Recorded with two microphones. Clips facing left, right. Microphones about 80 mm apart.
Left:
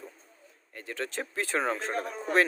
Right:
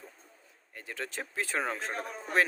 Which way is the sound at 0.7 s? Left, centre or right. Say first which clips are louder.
Left 4 dB; centre.